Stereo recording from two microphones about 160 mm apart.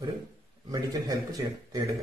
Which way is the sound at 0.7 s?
25° right (ahead or behind).